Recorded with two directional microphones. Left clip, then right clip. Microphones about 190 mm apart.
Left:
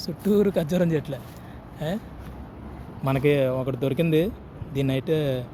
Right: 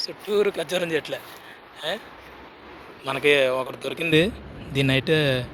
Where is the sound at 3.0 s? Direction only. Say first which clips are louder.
Right 3 dB; 10° left (ahead or behind).